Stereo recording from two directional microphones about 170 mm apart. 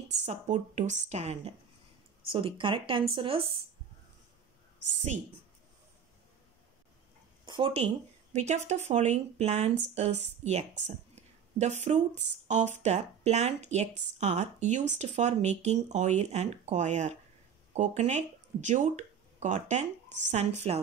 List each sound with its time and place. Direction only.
0.2 s speech: 45° right (ahead or behind)
7.4 s speech: 30° right (ahead or behind)
11.1 s a sound: 40° right (ahead or behind)
12.4 s speech: 45° right (ahead or behind)